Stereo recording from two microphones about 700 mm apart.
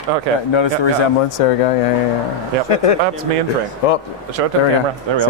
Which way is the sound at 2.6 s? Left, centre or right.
Left.